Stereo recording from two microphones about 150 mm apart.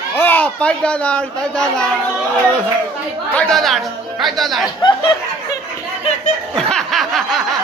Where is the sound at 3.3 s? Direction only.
5° left (ahead or behind).